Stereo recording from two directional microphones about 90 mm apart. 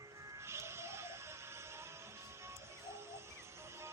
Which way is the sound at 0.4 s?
30° right (ahead or behind).